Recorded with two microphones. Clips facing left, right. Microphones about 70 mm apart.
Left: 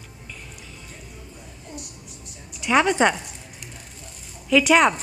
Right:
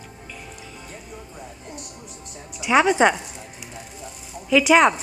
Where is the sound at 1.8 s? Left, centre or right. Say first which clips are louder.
Right 2 dB; right.